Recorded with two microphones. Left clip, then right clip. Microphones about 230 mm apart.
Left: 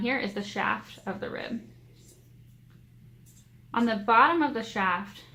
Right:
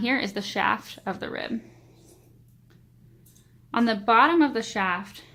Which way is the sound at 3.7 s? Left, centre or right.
Right.